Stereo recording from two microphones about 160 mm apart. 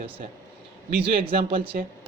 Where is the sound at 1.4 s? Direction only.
35° right (ahead or behind).